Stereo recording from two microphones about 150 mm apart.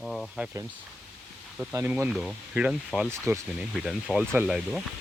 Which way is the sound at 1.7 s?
15° right (ahead or behind).